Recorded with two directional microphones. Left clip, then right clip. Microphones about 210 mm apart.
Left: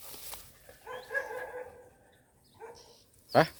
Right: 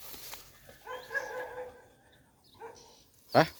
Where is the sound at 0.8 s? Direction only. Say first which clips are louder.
Left 1 dB; 55° left (ahead or behind).